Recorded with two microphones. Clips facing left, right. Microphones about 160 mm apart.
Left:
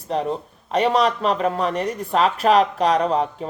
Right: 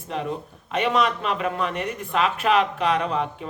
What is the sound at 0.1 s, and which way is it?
Speech, 35° left (ahead or behind).